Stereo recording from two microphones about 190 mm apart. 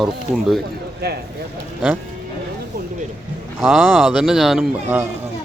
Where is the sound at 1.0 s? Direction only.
55° right (ahead or behind).